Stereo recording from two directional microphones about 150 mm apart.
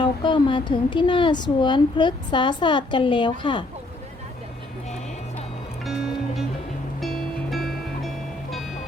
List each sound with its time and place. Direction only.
0.0 s speech: 30° left (ahead or behind)
5.8 s music: centre (ahead or behind)